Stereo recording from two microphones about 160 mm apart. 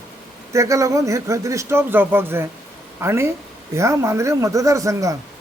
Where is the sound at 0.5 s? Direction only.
20° right (ahead or behind).